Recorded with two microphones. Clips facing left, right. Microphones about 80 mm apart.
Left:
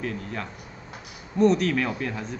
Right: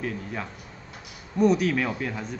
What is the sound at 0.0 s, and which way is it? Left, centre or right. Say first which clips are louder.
A man's voice: even; centre.